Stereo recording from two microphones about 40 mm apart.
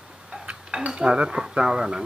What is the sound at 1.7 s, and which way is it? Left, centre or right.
Speech, centre.